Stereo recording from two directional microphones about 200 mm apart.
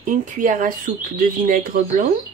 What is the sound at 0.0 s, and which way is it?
Speech, 40° right (ahead or behind).